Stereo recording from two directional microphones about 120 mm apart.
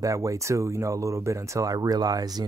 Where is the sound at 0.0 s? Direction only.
25° right (ahead or behind).